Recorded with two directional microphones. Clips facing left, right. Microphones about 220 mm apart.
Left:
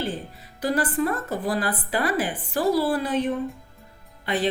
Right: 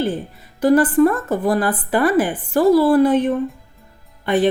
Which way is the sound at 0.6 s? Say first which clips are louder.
Right 11 dB; 50° right (ahead or behind).